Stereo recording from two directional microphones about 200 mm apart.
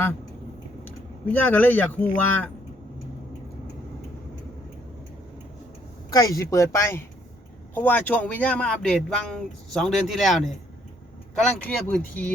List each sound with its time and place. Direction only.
0.9 s speech: 10° left (ahead or behind)
6.1 s speech: 20° left (ahead or behind)